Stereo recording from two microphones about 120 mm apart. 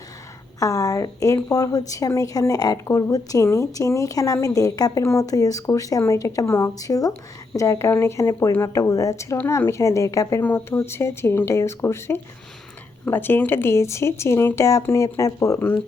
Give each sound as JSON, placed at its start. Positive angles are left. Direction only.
{"t": 0.6, "sound": "a woman's voice", "side_deg": 30}